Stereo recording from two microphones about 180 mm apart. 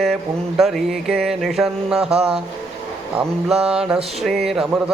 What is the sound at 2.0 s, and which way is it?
Speech, 35° right (ahead or behind).